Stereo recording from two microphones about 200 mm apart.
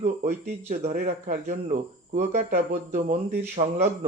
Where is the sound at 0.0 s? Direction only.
35° right (ahead or behind).